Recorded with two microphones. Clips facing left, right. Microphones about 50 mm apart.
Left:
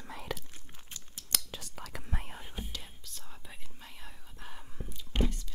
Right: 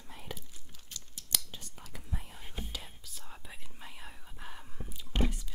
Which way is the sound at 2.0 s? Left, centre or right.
Left.